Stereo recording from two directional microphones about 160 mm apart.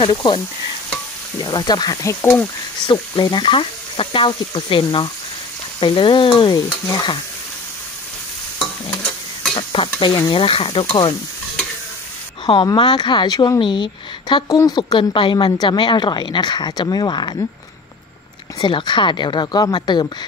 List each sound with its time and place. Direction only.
0.0 s a woman's voice: 30° left (ahead or behind)
1.4 s a woman's voice: 25° left (ahead or behind)
2.9 s speech: 25° left (ahead or behind)
9.6 s speech: 30° left (ahead or behind)
12.4 s a woman's voice: 30° left (ahead or behind)
18.6 s a woman's voice: 30° left (ahead or behind)